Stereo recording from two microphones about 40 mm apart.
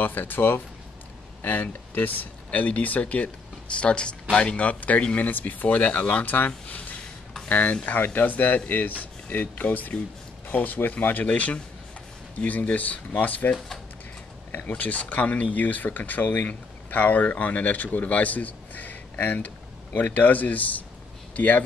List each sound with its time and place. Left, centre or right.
0.0 s speech: left
3.7 s speech: left
14.7 s speech: left